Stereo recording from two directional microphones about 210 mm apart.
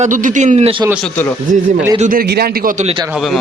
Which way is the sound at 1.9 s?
40° right (ahead or behind).